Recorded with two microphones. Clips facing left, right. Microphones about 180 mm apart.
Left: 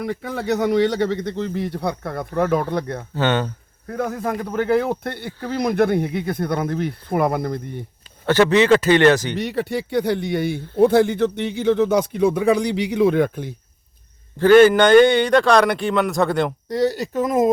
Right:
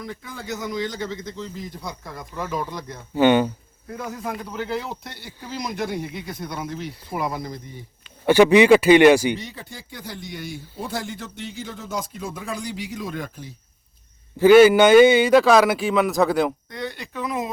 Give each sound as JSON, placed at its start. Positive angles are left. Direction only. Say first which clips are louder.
{"t": 0.0, "sound": "speech", "louder": "left 10 dB", "side_deg": 70}
{"t": 3.2, "sound": "speech", "louder": "right 4 dB", "side_deg": -10}
{"t": 3.8, "sound": "speech", "louder": "left 7 dB", "side_deg": 55}
{"t": 8.3, "sound": "speech", "louder": "right 2 dB", "side_deg": -10}
{"t": 9.4, "sound": "speech", "louder": "left 15 dB", "side_deg": 70}
{"t": 14.3, "sound": "a man's voice", "louder": "even", "side_deg": -10}
{"t": 16.6, "sound": "speech", "louder": "left 12 dB", "side_deg": 40}